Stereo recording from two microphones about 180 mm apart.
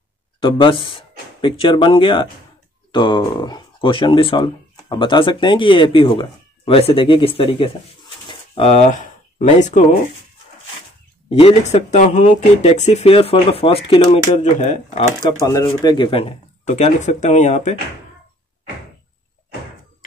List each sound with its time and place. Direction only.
0.4 s speech: 30° left (ahead or behind)
8.3 s a sound: 35° left (ahead or behind)
11.2 s speech: 35° left (ahead or behind)
15.2 s speech: 20° left (ahead or behind); by 17.7 s 40° left (ahead or behind)